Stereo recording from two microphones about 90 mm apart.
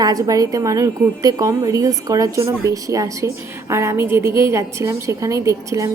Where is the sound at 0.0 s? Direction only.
40° right (ahead or behind).